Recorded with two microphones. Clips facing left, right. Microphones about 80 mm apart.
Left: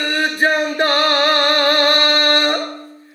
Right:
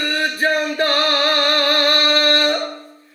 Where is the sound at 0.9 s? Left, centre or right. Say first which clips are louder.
Left 2 dB; left.